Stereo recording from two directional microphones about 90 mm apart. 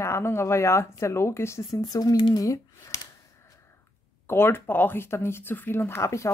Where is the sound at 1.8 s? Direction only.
45° left (ahead or behind).